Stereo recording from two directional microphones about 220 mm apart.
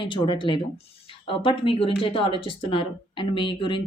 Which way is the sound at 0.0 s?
20° left (ahead or behind).